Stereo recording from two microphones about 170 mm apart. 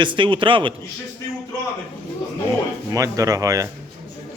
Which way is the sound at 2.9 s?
20° right (ahead or behind).